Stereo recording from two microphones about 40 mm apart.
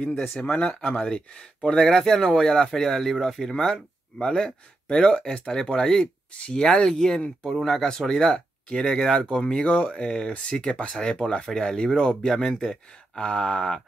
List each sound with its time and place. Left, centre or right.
0.4 s speech: left
0.7 s speech: centre
7.4 s speech: centre; by 13.7 s left